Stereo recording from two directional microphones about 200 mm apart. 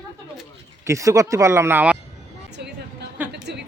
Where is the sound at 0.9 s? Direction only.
15° right (ahead or behind).